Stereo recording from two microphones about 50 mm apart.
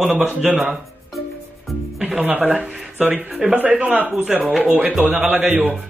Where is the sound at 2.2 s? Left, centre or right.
Right.